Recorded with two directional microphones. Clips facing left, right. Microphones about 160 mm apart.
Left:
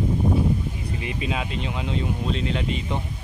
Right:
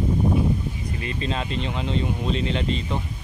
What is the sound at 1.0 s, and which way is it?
Speech, 15° left (ahead or behind).